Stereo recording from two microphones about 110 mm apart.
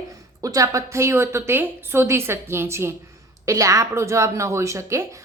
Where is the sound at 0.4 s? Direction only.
30° right (ahead or behind).